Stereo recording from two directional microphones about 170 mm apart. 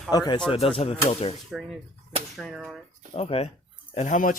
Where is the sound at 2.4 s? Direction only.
Centre (ahead or behind).